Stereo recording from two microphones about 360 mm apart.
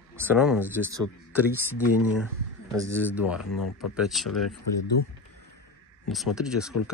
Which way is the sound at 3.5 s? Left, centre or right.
Left.